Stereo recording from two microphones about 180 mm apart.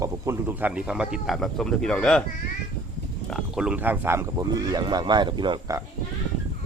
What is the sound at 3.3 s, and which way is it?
Speech, centre (ahead or behind).